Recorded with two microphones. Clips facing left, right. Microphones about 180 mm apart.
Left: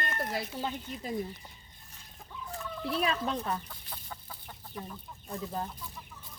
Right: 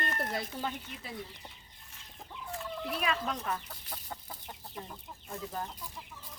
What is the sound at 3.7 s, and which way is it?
Chicken, 35° right (ahead or behind).